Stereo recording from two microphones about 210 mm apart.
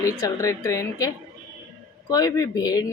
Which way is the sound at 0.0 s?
15° left (ahead or behind).